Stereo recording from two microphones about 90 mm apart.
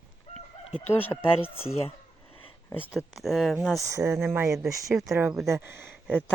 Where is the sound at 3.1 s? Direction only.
Centre (ahead or behind).